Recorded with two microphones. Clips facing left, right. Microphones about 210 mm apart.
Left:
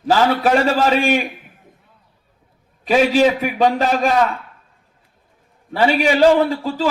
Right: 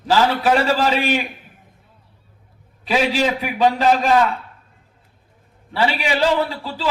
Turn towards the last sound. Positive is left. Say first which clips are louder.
# left 5 dB
turn(degrees=45)  # may be behind; listen again after turning